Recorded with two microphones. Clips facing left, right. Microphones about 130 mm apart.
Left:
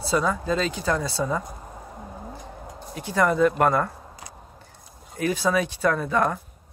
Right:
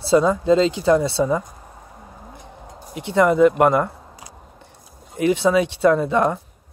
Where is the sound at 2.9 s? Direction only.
20° right (ahead or behind).